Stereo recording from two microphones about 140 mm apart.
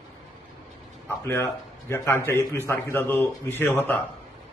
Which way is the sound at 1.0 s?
15° left (ahead or behind).